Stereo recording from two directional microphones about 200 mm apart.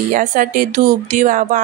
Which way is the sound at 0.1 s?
40° right (ahead or behind).